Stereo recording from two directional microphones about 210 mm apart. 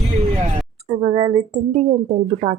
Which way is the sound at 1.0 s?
25° right (ahead or behind).